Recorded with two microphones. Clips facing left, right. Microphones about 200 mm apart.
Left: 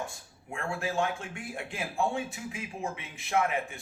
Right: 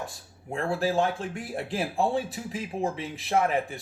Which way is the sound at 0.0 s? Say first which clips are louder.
Right 1 dB; 35° right (ahead or behind).